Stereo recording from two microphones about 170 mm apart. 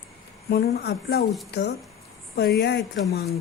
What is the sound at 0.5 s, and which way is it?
Speech, 70° left (ahead or behind).